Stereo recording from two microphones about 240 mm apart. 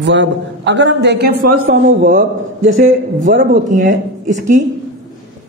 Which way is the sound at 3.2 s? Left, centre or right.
Right.